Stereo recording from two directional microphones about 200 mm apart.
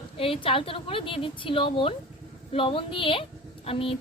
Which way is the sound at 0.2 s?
25° left (ahead or behind).